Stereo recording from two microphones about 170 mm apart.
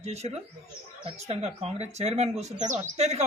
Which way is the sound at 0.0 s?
40° right (ahead or behind).